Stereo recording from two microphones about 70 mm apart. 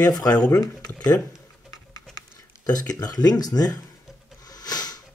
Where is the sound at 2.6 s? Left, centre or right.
Left.